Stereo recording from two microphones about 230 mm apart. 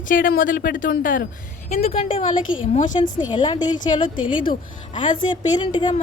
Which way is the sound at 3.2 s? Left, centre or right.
Centre.